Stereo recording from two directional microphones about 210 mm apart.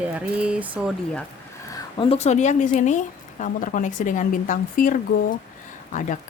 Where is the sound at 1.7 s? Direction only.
25° left (ahead or behind).